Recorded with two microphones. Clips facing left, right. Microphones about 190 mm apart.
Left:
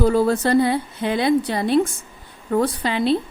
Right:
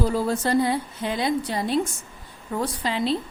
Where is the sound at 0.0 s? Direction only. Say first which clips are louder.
Left 6 dB; 65° left (ahead or behind).